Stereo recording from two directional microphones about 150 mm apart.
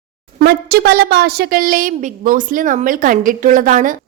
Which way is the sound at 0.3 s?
90° right.